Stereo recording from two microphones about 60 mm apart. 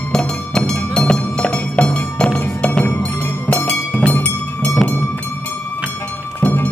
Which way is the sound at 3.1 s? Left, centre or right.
Left.